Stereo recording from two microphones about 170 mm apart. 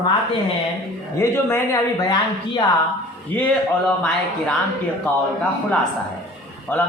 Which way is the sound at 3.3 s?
10° left (ahead or behind).